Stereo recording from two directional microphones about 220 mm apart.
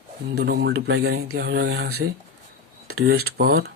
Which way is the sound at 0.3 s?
50° right (ahead or behind).